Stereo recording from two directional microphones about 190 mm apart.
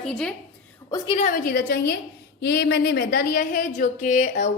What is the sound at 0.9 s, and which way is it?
Speech, 20° left (ahead or behind).